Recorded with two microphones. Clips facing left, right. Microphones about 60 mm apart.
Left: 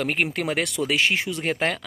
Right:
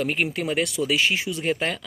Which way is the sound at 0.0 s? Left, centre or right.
Left.